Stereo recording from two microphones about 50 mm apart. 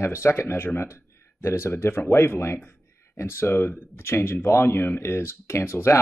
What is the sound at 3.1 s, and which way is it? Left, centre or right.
Speech, left.